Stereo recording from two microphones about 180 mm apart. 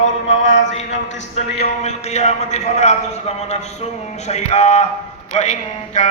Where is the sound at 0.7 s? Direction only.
40° left (ahead or behind).